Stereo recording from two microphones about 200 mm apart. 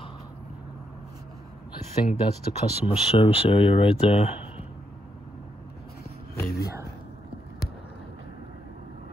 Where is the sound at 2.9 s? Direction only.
30° left (ahead or behind).